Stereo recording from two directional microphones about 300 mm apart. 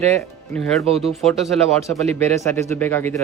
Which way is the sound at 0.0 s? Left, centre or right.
Centre.